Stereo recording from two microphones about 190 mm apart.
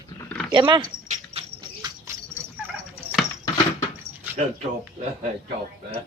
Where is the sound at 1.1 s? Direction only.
30° right (ahead or behind).